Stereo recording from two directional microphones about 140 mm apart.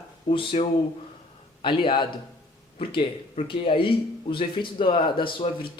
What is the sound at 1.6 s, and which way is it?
Speech, 35° left (ahead or behind).